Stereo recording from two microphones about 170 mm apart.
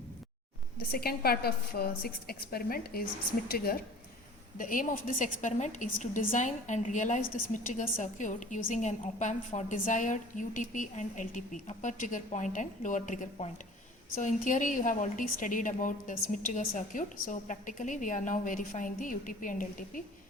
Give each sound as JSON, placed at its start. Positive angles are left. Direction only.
{"t": 0.8, "sound": "a woman's voice", "side_deg": 65}
{"t": 4.5, "sound": "a woman's voice", "side_deg": 50}